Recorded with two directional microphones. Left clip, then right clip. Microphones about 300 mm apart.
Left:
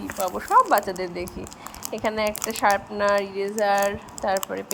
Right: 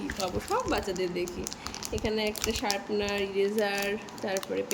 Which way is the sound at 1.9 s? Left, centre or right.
Left.